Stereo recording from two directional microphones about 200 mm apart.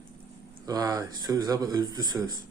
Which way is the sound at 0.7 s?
15° right (ahead or behind).